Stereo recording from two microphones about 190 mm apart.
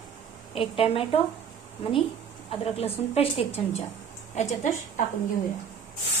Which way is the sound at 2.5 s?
30° left (ahead or behind).